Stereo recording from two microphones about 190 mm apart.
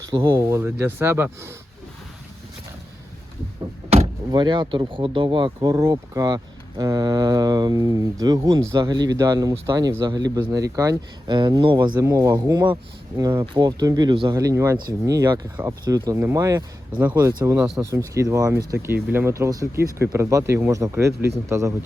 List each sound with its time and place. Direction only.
0.0 s speech: 15° right (ahead or behind)
3.8 s door: 35° right (ahead or behind)
4.3 s speech: 25° right (ahead or behind)
11.9 s speech: 15° right (ahead or behind)